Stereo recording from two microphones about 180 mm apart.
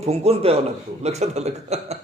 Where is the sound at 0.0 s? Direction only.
35° right (ahead or behind).